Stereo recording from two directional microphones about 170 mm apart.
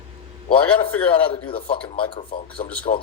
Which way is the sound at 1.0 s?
30° left (ahead or behind).